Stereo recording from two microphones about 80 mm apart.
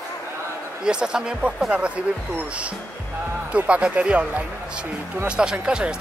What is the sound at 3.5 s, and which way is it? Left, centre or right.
Speech, centre.